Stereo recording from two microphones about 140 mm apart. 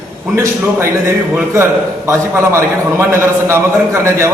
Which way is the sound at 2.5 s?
20° right (ahead or behind).